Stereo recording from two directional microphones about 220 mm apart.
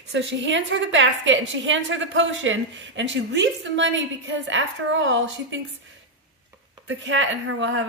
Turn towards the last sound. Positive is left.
turn(degrees=-60)  # may be behind; listen again after turning